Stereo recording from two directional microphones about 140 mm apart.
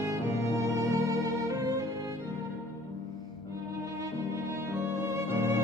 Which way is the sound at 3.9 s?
20° right (ahead or behind).